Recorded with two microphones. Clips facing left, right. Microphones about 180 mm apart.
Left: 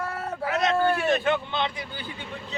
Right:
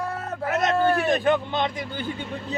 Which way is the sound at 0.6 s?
40° right (ahead or behind).